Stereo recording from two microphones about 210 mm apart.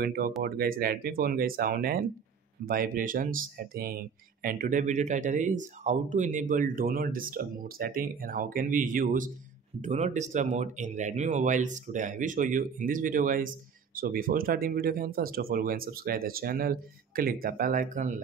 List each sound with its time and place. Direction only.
0.0 s speech: 45° right (ahead or behind)